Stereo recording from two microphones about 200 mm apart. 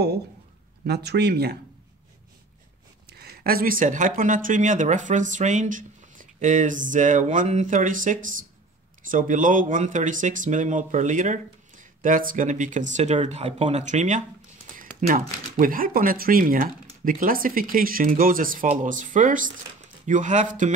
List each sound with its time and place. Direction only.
0.8 s speech: 55° right (ahead or behind)
3.1 s speech: 55° right (ahead or behind)